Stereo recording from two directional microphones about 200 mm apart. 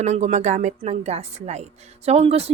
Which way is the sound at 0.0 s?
35° right (ahead or behind).